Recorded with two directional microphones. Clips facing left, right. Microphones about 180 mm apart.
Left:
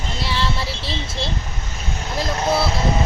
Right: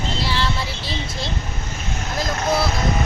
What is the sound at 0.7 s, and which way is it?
Vehicle, 30° left (ahead or behind).